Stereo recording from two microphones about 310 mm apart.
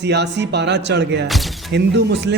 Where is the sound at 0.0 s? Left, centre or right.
Right.